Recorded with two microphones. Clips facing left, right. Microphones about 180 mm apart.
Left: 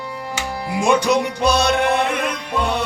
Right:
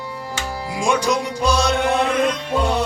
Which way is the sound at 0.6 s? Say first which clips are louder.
Left 3 dB; 60° left (ahead or behind).